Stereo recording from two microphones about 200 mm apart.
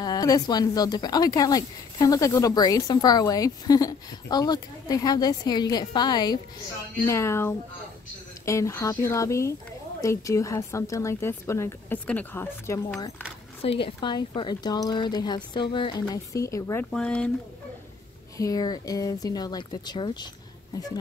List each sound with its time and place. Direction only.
0.0 s a woman's voice: 20° left (ahead or behind)
13.6 s a woman's voice: 30° left (ahead or behind)
16.9 s speech: 5° left (ahead or behind)
18.4 s a woman's voice: 20° left (ahead or behind)